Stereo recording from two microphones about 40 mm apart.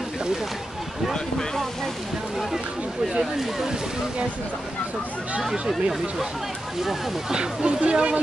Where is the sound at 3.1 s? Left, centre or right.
Centre.